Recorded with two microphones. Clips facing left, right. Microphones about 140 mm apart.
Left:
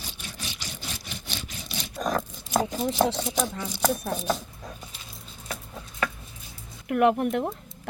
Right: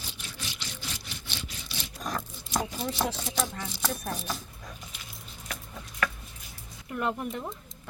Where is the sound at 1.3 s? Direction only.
45° left (ahead or behind).